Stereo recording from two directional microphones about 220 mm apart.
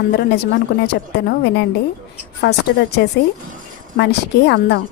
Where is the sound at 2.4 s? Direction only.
50° left (ahead or behind).